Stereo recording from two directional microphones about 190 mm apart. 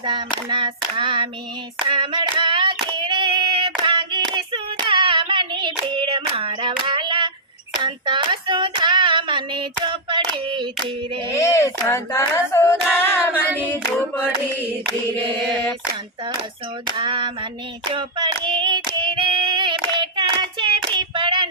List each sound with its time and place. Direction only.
0.0 s hands: 25° right (ahead or behind)
7.8 s child singing: 25° right (ahead or behind)
11.3 s female singing: 15° left (ahead or behind)
16.9 s hands: 25° right (ahead or behind)
18.4 s singing: 25° right (ahead or behind)
19.9 s hands: 25° right (ahead or behind)
20.9 s child singing: 25° right (ahead or behind)